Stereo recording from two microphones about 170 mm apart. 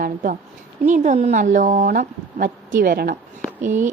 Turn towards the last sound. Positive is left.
turn(degrees=-50)  # may be behind; listen again after turning